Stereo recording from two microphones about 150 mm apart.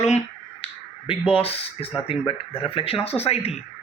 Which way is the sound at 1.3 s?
40° left (ahead or behind).